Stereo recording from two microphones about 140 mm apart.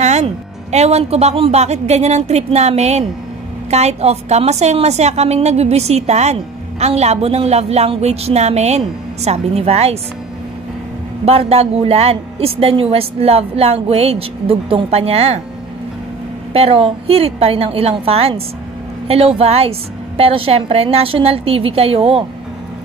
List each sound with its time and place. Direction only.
0.0 s a woman's voice: 55° right (ahead or behind)
11.2 s a woman's voice: 45° right (ahead or behind)
16.5 s a woman's voice: 45° right (ahead or behind)